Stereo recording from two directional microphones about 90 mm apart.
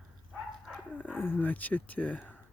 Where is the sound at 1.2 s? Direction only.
25° left (ahead or behind).